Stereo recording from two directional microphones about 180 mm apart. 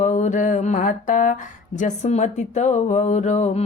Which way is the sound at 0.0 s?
40° left (ahead or behind).